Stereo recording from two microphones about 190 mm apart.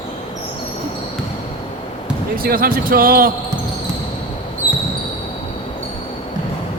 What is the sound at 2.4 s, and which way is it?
Speech, 50° right (ahead or behind).